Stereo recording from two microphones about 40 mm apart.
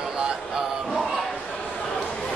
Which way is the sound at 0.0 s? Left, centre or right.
Centre.